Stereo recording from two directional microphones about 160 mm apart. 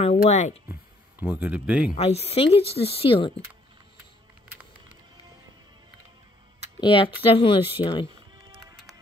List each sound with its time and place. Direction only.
0.3 s speech: 45° left (ahead or behind)
1.2 s speech: 10° right (ahead or behind)
2.0 s speech: 40° left (ahead or behind)
6.8 s speech: 35° left (ahead or behind)